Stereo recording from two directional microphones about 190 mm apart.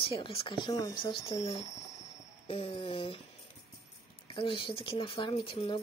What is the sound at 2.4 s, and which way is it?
Speech, 30° left (ahead or behind).